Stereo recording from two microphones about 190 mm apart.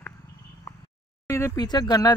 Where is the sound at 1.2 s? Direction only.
15° left (ahead or behind).